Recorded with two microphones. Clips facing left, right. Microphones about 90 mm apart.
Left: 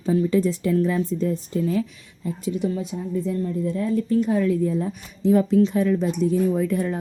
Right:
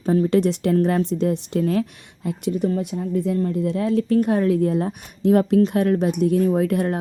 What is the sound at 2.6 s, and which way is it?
Speech, 55° right (ahead or behind).